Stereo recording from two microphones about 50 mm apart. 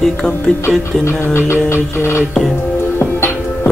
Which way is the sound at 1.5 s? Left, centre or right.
Left.